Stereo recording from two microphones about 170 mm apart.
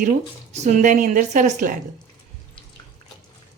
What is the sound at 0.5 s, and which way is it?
A woman's voice, 45° right (ahead or behind).